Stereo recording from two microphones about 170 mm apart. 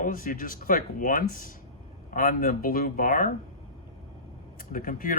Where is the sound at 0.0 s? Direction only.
55° left (ahead or behind).